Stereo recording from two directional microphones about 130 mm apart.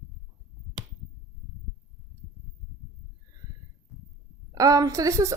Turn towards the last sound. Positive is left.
turn(degrees=-25)  # may be behind; listen again after turning